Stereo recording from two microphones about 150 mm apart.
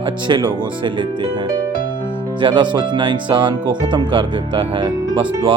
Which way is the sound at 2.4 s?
35° right (ahead or behind).